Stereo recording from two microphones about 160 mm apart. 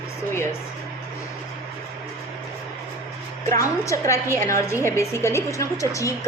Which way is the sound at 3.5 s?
20° left (ahead or behind).